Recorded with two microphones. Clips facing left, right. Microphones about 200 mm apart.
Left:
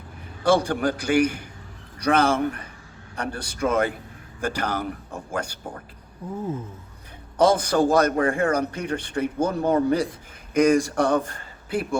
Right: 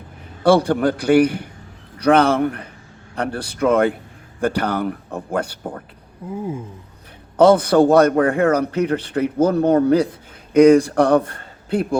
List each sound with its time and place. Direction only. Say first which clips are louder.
0.4 s speech: right 6 dB; 60° right (ahead or behind)
6.2 s a sound: right 3 dB; 10° right (ahead or behind)
7.3 s a man's voice: right 7 dB; 60° right (ahead or behind)